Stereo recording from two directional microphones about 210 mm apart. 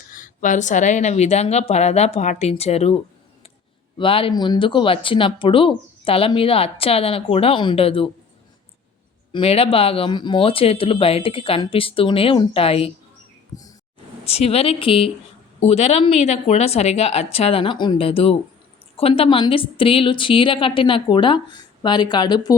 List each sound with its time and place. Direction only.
0.1 s a woman's voice: 40° left (ahead or behind)
3.9 s speech: 25° left (ahead or behind)
9.3 s speech: 25° left (ahead or behind)
14.3 s speech: 30° left (ahead or behind)